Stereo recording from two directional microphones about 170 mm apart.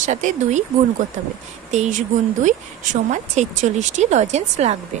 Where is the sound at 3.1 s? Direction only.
45° right (ahead or behind).